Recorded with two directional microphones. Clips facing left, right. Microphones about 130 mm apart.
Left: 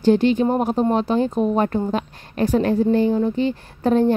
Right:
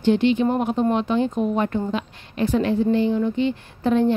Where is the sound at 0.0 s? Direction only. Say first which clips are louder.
Left 2 dB; 40° left (ahead or behind).